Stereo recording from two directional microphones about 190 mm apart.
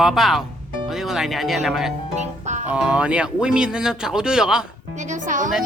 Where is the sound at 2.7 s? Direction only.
5° right (ahead or behind).